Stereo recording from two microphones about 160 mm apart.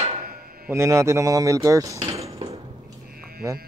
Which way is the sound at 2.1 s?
40° right (ahead or behind).